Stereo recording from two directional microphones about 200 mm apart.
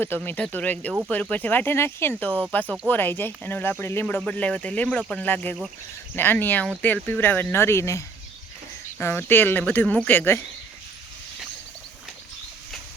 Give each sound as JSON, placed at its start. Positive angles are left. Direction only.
{"t": 0.0, "sound": "speech", "side_deg": 10}